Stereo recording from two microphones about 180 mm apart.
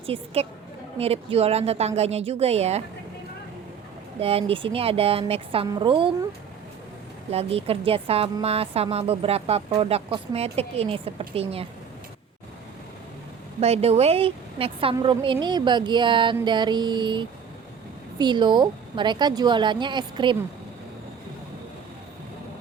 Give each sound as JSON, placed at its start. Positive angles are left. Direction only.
{"t": 0.0, "sound": "a woman's voice", "side_deg": -30}
{"t": 4.2, "sound": "a woman's voice", "side_deg": -35}
{"t": 7.3, "sound": "a woman's voice", "side_deg": -35}
{"t": 13.6, "sound": "a woman's voice", "side_deg": -35}